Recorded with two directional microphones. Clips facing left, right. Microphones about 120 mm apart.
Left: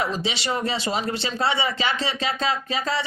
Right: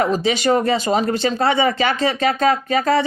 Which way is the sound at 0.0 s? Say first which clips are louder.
Right 9 dB; 50° right (ahead or behind).